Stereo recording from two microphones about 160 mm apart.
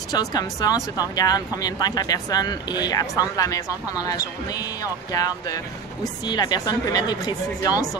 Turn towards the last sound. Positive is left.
turn(degrees=25)  # may be behind; listen again after turning